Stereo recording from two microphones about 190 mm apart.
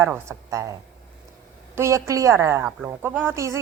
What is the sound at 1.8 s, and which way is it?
A woman's voice, 15° right (ahead or behind).